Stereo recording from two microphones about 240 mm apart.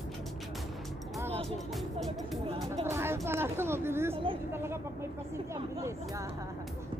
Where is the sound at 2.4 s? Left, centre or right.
Right.